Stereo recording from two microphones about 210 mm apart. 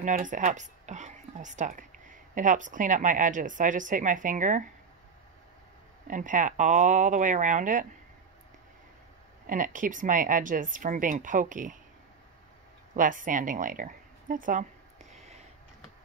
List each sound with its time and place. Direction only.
0.0 s a woman's voice: 40° right (ahead or behind)
6.0 s speech: 40° right (ahead or behind)
9.5 s speech: 40° right (ahead or behind)
12.9 s a sound: 40° right (ahead or behind)